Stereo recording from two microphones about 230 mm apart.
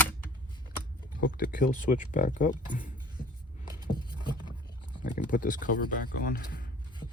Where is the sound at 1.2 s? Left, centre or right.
Left.